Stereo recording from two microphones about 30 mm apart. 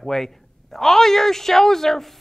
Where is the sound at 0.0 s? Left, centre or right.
Centre.